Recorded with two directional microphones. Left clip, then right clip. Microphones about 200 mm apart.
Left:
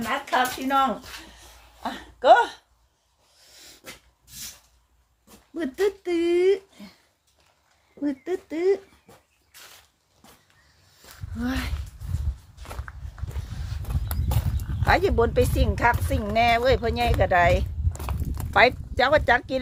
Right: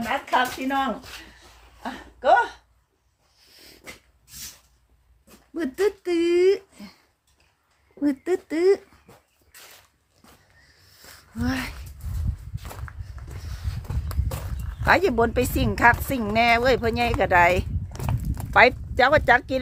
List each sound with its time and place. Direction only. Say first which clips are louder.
0.1 s speech: right 1 dB; centre (ahead or behind)
1.8 s speech: left 2 dB; 45° left (ahead or behind)
3.5 s dog: left 1 dB; 25° left (ahead or behind)
5.5 s speech: right 1 dB; 15° right (ahead or behind)
8.0 s speech: right 4 dB; 25° right (ahead or behind)
11.3 s speech: right 2 dB; 10° right (ahead or behind)
12.9 s walk: left 1 dB; centre (ahead or behind)
14.8 s speech: right 2 dB; 15° right (ahead or behind)